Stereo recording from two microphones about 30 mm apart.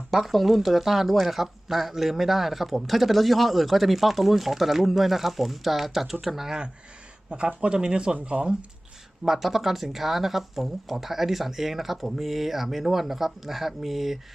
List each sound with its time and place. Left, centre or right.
0.1 s a man's voice: centre
7.3 s speech: right
9.2 s speech: centre